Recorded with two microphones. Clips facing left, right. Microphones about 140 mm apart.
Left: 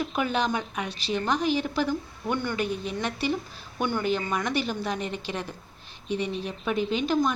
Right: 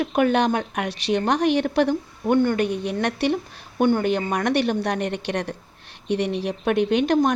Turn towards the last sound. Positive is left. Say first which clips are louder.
# right 6 dB
turn(degrees=-65)  # may be behind; listen again after turning